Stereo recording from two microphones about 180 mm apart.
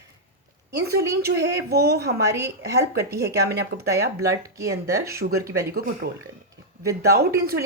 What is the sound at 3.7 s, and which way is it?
Speech, 55° right (ahead or behind).